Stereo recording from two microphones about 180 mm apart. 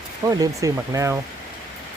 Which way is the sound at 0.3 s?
20° right (ahead or behind).